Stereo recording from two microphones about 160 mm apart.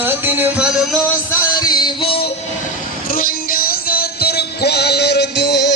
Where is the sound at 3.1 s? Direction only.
60° left (ahead or behind).